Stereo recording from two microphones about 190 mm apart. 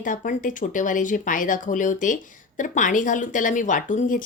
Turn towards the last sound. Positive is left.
turn(degrees=45)  # may be behind; listen again after turning